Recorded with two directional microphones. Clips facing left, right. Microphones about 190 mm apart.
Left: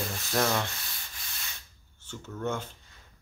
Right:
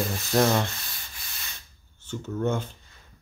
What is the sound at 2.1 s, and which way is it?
Speech, 20° right (ahead or behind).